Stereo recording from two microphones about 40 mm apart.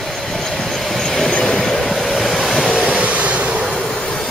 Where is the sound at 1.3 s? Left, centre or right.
Centre.